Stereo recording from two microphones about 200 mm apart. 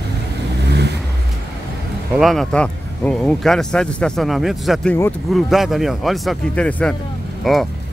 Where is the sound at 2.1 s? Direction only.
Centre (ahead or behind).